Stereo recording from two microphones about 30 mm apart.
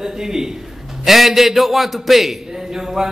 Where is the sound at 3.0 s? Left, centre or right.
Centre.